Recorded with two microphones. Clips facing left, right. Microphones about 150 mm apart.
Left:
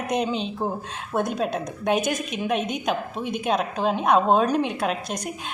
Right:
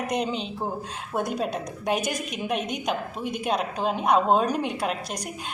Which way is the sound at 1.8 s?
55° left (ahead or behind).